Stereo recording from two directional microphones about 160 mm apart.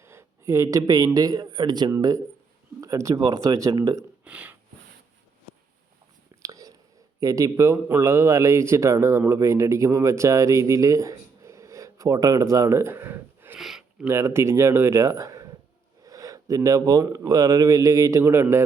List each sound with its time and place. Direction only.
0.0 s a man's voice: 15° right (ahead or behind)
4.2 s a sound: 10° right (ahead or behind)
6.4 s whispering: 20° right (ahead or behind)
7.2 s a man's voice: 20° right (ahead or behind)
13.6 s a sound: centre (ahead or behind)
14.0 s a man's voice: 15° right (ahead or behind)